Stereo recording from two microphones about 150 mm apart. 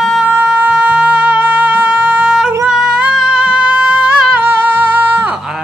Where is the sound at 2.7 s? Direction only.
5° right (ahead or behind).